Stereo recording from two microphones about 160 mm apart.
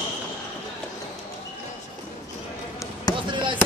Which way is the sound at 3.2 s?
30° right (ahead or behind).